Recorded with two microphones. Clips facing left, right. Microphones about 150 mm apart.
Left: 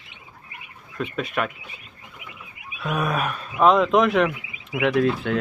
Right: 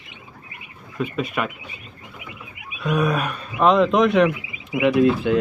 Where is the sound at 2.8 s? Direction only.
Centre (ahead or behind).